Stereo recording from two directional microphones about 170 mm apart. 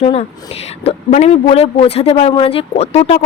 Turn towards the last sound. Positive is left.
turn(degrees=40)  # may be behind; listen again after turning